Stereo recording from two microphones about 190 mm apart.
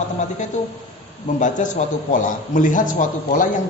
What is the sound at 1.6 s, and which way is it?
A man's voice, 40° left (ahead or behind).